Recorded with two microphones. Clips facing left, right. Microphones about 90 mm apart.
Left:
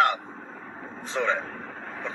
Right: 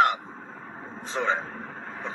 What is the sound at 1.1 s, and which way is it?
Speech, 35° right (ahead or behind).